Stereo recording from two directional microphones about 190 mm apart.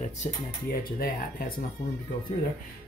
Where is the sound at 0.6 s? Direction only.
50° left (ahead or behind).